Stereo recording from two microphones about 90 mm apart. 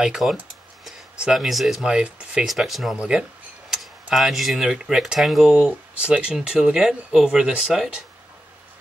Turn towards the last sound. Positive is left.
turn(degrees=-5)  # may be behind; listen again after turning